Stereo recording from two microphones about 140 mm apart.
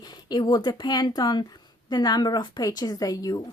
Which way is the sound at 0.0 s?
30° left (ahead or behind).